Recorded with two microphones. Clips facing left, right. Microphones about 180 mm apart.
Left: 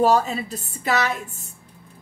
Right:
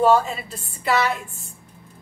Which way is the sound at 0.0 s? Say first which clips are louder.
Right 1 dB; 40° left (ahead or behind).